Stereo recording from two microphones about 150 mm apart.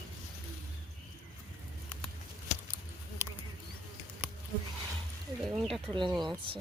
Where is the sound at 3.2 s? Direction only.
20° right (ahead or behind).